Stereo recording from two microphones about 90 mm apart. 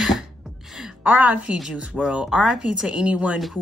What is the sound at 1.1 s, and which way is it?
Speech, 15° right (ahead or behind).